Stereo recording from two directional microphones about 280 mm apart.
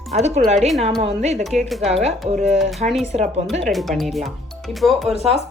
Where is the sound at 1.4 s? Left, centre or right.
Centre.